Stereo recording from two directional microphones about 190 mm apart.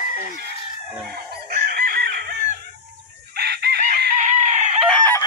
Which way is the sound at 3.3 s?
55° right (ahead or behind).